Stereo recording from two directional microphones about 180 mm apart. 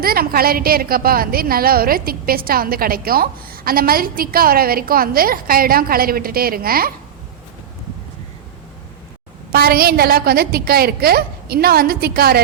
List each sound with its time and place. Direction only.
0.0 s a woman's voice: 55° right (ahead or behind)
9.5 s a woman's voice: 55° right (ahead or behind)